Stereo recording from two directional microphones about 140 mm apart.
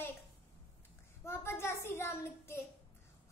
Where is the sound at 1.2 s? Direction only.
15° left (ahead or behind).